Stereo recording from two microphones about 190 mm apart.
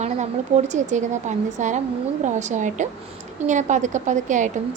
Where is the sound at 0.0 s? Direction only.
35° right (ahead or behind).